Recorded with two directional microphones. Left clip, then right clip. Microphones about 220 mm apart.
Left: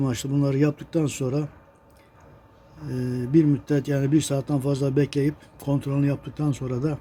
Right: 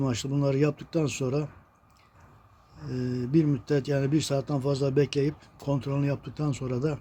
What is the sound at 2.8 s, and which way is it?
Speech, 5° left (ahead or behind).